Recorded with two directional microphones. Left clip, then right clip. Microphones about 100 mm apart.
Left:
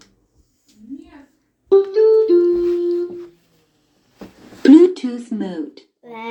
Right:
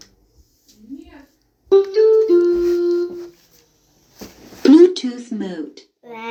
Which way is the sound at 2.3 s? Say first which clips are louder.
Even; 30° left (ahead or behind).